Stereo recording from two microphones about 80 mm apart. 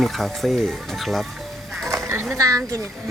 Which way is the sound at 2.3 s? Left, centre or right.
Right.